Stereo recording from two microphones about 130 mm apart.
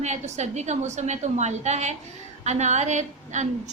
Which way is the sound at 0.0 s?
60° right (ahead or behind).